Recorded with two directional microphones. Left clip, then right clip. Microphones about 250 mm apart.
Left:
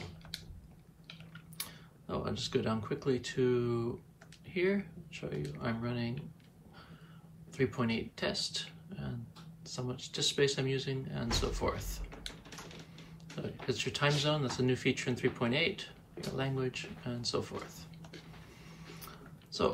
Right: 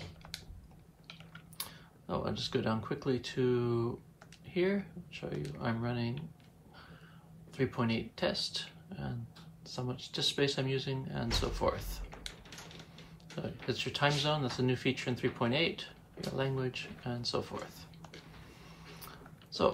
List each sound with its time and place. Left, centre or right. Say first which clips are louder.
1.6 s speech: even; centre
7.5 s speech: even; centre
13.4 s speech: even; centre
18.9 s a sound: even; centre